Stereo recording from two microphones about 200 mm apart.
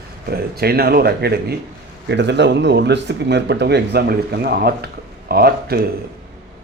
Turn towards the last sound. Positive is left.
turn(degrees=-50)  # may be behind; listen again after turning